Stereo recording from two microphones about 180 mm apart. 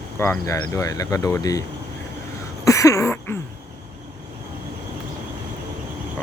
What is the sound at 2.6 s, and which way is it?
Throat clearing, 15° left (ahead or behind).